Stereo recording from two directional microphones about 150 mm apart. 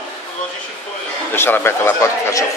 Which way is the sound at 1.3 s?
15° left (ahead or behind).